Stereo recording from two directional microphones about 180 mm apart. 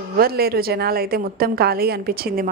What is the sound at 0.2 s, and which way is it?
A woman's voice, 60° right (ahead or behind).